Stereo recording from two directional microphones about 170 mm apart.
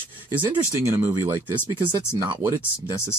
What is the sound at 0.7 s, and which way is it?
Speech, 15° right (ahead or behind).